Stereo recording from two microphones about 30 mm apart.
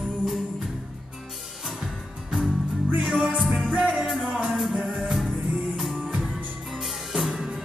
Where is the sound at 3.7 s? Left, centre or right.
Right.